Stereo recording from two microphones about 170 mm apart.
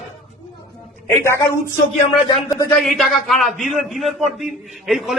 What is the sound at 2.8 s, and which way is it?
A man's voice, centre (ahead or behind).